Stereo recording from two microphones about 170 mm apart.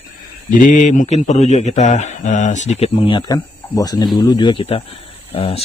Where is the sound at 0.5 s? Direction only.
50° left (ahead or behind).